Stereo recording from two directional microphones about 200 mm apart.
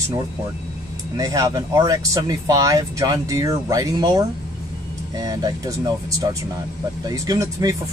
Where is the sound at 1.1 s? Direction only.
15° right (ahead or behind).